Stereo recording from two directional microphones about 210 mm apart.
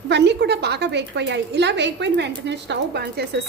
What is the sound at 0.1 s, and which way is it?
A woman's voice, 55° right (ahead or behind).